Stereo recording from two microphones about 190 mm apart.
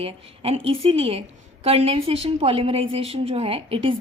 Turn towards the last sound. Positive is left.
turn(degrees=-30)  # may be behind; listen again after turning